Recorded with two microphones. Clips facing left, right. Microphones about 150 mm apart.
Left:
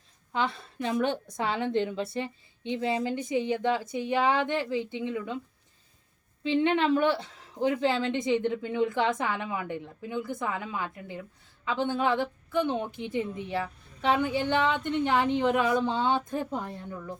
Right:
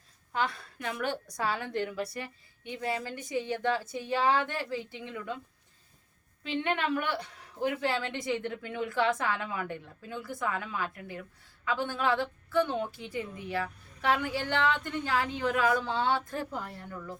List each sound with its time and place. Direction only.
0.3 s a woman's voice: 25° left (ahead or behind)
6.4 s a woman's voice: 25° left (ahead or behind)